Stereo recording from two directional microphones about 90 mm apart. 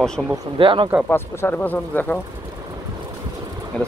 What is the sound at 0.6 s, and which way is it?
Speech, 70° right (ahead or behind).